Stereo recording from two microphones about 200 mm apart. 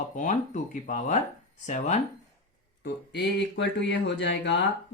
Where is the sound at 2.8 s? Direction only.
60° left (ahead or behind).